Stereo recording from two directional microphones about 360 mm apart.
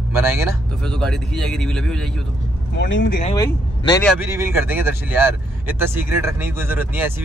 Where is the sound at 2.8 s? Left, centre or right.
Left.